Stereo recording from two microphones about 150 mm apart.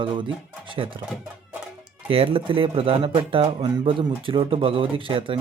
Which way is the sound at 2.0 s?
40° right (ahead or behind).